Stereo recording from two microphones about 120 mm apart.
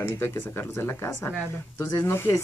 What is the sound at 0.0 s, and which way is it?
Speech, 20° left (ahead or behind).